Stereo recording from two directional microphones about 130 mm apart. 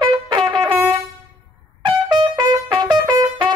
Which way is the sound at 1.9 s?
35° right (ahead or behind).